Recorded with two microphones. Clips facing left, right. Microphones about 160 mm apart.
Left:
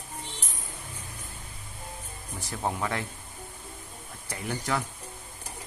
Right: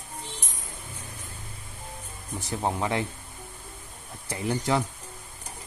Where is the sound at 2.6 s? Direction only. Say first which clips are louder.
Right 3 dB; 20° right (ahead or behind).